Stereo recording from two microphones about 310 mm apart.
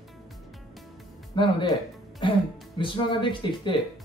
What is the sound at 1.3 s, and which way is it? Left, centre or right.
Speech, centre.